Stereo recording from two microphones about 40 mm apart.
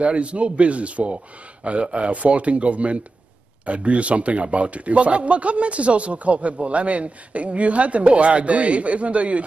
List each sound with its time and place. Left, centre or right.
0.0 s a man's voice: right